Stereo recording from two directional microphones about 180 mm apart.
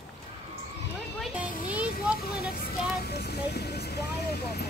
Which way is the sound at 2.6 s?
65° left (ahead or behind).